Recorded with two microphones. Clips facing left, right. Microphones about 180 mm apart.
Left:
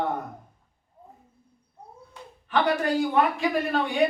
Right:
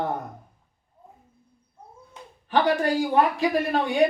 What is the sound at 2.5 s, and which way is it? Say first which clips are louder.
Speech: right 2 dB; 35° right (ahead or behind).